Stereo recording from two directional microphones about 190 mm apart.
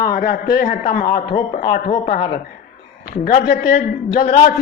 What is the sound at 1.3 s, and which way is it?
A man's voice, 30° left (ahead or behind).